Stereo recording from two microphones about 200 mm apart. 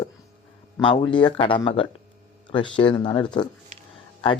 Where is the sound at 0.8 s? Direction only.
25° left (ahead or behind).